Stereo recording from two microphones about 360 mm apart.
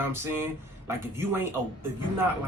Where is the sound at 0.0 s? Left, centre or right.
Centre.